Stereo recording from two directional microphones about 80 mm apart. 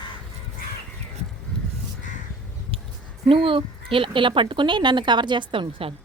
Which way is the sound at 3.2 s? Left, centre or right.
Right.